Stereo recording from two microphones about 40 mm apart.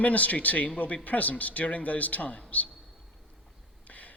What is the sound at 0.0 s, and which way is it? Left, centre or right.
A man's voice, left.